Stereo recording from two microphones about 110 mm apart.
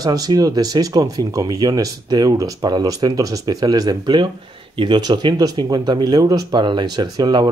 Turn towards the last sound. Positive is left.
turn(degrees=-40)  # may be behind; listen again after turning